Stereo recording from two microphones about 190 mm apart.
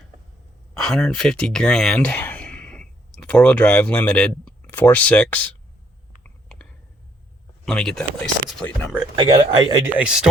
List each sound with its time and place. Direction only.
0.7 s speech: 5° left (ahead or behind)
6.2 s a sound: 5° left (ahead or behind)
7.6 s speech: 5° left (ahead or behind)
9.1 s speech: 25° right (ahead or behind)
9.9 s speech: 5° right (ahead or behind)